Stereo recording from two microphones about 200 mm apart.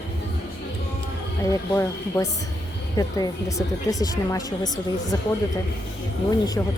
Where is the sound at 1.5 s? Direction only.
15° left (ahead or behind).